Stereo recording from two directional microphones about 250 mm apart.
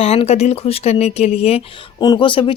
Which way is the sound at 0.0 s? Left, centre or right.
Left.